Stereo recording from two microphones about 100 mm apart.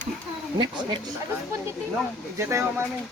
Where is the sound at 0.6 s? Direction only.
50° right (ahead or behind).